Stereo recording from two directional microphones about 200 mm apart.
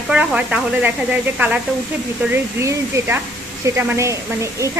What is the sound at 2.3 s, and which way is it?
A woman's voice, 10° right (ahead or behind).